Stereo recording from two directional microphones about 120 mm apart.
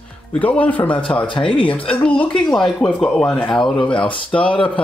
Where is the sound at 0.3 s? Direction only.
10° left (ahead or behind).